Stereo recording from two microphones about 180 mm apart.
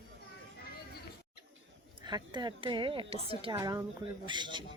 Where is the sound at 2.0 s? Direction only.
25° right (ahead or behind).